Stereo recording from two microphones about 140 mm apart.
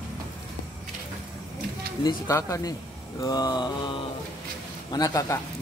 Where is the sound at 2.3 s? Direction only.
20° left (ahead or behind).